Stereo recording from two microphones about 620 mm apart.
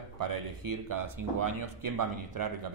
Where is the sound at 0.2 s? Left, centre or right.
Right.